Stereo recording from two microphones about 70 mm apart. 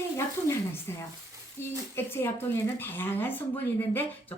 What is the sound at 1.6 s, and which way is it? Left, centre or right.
A woman's voice, left.